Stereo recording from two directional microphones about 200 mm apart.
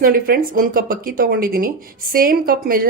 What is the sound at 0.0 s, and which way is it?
Speech, 45° right (ahead or behind).